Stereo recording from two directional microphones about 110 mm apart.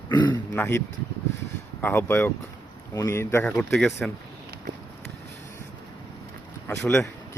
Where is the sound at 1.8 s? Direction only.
20° left (ahead or behind).